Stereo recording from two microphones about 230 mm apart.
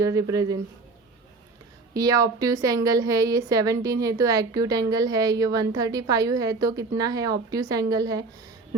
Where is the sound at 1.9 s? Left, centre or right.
Centre.